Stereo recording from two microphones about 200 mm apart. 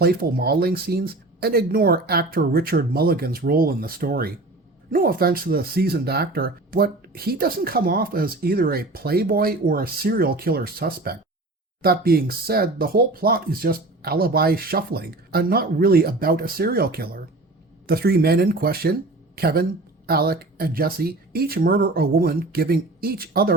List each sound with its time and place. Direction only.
0.0 s speech: 50° right (ahead or behind)